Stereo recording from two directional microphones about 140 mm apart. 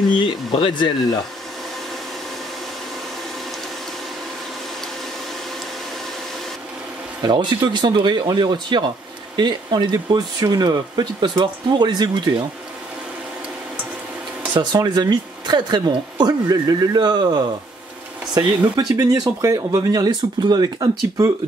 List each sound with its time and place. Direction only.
0.2 s speech: 35° left (ahead or behind)
7.2 s speech: 35° right (ahead or behind)
14.5 s speech: 30° right (ahead or behind)